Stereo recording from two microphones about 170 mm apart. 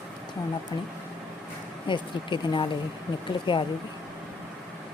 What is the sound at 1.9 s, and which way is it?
Speech, 30° left (ahead or behind).